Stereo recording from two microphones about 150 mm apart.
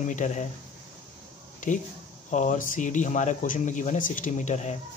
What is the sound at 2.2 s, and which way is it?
Speech, 55° left (ahead or behind).